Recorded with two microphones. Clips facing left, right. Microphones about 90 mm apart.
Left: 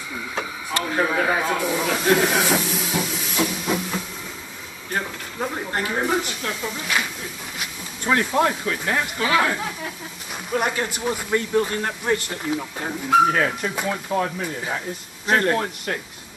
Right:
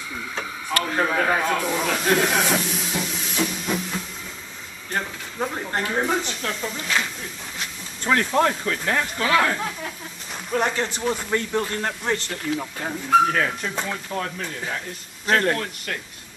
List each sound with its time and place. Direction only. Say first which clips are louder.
0.4 s snake: even; centre (ahead or behind)
4.9 s speech: left 1 dB; centre (ahead or behind)
14.1 s speech: left 6 dB; 20° left (ahead or behind)
15.2 s speech: left 1 dB; 10° left (ahead or behind)